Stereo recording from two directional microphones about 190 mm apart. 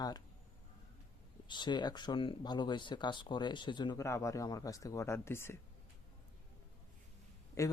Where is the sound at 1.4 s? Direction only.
25° left (ahead or behind).